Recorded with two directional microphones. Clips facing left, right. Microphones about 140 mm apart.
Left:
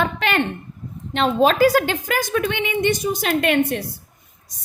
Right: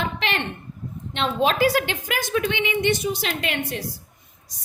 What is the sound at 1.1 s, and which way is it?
A woman's voice, 45° left (ahead or behind).